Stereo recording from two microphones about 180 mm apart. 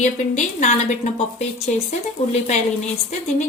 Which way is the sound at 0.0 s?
40° left (ahead or behind).